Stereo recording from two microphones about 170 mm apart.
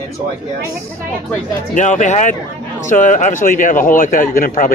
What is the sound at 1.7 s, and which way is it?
A man's voice, 45° left (ahead or behind).